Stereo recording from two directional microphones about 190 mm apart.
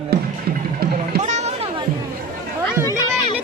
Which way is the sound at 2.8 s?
20° left (ahead or behind).